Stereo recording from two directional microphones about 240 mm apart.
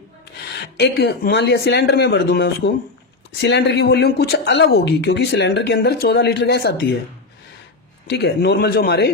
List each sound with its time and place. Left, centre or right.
0.5 s speech: left
8.0 s speech: left